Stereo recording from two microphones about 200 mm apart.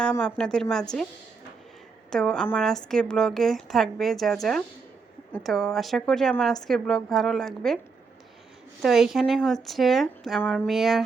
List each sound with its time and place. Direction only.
0.0 s a woman's voice: 5° left (ahead or behind)
2.0 s a woman's voice: 5° left (ahead or behind)
8.8 s a woman's voice: centre (ahead or behind)